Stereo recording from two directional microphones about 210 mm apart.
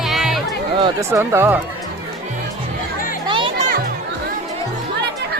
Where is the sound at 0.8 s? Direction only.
15° right (ahead or behind).